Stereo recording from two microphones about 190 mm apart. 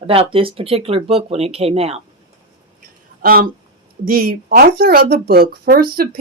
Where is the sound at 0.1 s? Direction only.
30° right (ahead or behind).